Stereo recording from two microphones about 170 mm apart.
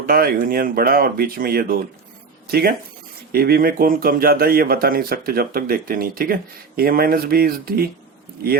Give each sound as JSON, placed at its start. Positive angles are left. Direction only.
{"t": 0.0, "sound": "speech", "side_deg": -60}